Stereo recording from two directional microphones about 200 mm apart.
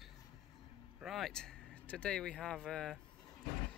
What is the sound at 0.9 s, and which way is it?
A man's voice, centre (ahead or behind).